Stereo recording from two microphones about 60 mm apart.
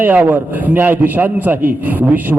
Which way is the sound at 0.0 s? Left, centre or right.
Right.